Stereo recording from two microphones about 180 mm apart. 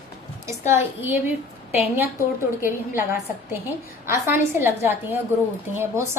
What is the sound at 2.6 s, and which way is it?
A woman's voice, 15° right (ahead or behind).